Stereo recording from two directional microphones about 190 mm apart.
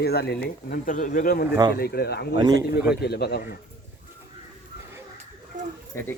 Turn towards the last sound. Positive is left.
turn(degrees=15)  # may be behind; listen again after turning